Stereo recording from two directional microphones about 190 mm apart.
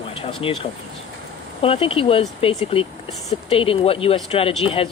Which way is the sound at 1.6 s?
30° left (ahead or behind).